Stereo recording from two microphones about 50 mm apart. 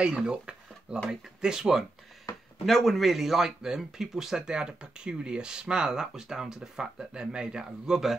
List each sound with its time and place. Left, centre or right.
0.0 s speech: centre
2.6 s speech: centre